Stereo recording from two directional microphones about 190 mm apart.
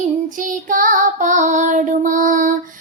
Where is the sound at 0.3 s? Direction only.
45° right (ahead or behind).